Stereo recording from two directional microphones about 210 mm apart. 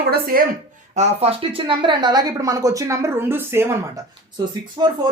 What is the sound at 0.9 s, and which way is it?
A woman's voice, 30° right (ahead or behind).